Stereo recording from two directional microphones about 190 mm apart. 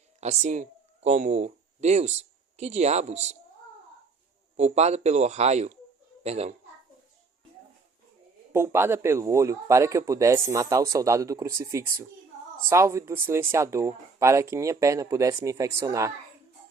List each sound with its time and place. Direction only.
0.2 s speech: 35° right (ahead or behind)
4.5 s speech: 35° right (ahead or behind)
8.5 s a man's voice: 15° right (ahead or behind)